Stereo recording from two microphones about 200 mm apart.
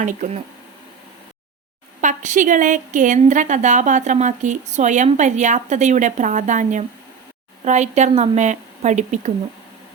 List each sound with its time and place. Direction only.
0.0 s a woman's voice: 40° right (ahead or behind)
2.0 s a woman's voice: 40° right (ahead or behind)